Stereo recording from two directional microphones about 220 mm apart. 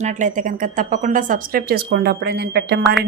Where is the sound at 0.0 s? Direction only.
35° right (ahead or behind).